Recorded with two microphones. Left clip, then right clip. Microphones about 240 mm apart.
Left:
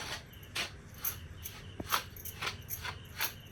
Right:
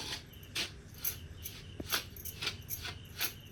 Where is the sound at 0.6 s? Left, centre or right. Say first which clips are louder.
Left 1 dB; centre.